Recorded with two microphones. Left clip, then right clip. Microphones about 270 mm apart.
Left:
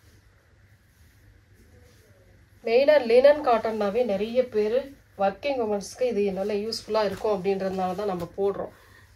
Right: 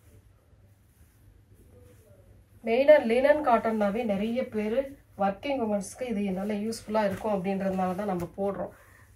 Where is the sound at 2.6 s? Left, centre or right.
Left.